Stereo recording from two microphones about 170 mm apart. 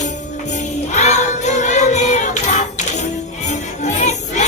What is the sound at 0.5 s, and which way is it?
Music, 45° left (ahead or behind).